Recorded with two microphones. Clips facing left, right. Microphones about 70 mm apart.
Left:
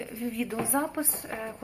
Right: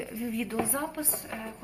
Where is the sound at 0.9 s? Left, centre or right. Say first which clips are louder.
Left 3 dB; left.